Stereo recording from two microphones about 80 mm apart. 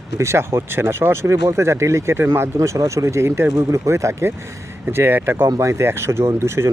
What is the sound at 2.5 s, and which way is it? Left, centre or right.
Speech, right.